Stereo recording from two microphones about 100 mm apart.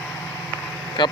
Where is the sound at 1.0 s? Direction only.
50° left (ahead or behind).